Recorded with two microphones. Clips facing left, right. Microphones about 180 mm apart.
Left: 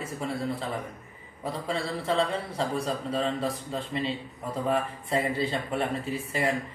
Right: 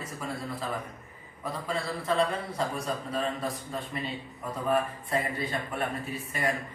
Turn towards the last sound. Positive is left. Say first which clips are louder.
# left 3 dB
turn(degrees=30)  # may be behind; listen again after turning